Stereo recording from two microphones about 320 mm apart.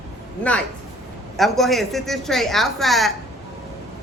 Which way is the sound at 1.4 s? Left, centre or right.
Centre.